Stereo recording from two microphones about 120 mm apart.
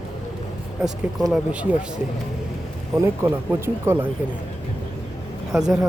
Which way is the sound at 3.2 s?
20° right (ahead or behind).